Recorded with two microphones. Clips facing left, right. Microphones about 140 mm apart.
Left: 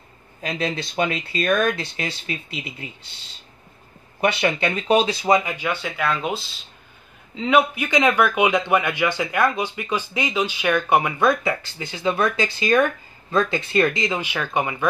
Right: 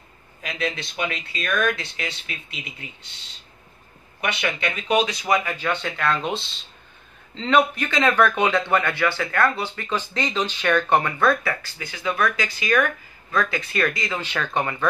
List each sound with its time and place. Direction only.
0.4 s speech: 30° left (ahead or behind)
4.2 s speech: 30° left (ahead or behind); by 14.9 s 15° left (ahead or behind)